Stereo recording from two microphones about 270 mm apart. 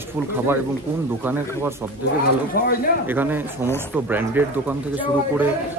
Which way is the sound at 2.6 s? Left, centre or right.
Left.